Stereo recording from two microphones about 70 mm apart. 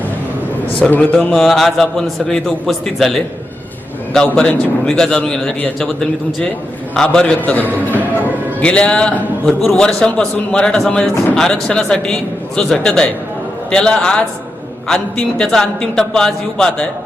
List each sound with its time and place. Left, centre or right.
0.8 s a man's voice: left
1.3 s a man's voice: centre
4.4 s a man's voice: centre
6.9 s a man's voice: centre
7.4 s a man's voice: left
8.6 s a man's voice: centre